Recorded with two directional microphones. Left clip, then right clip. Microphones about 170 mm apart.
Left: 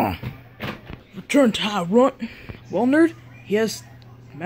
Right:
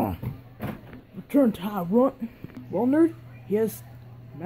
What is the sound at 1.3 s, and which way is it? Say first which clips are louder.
Speech: left 5 dB; 5° left (ahead or behind).